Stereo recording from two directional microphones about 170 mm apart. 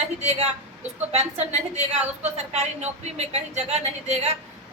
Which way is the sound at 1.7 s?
40° right (ahead or behind).